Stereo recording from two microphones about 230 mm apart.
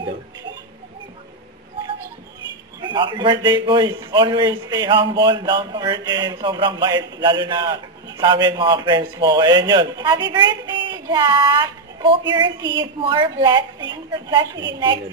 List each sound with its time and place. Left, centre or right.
2.8 s a man's voice: centre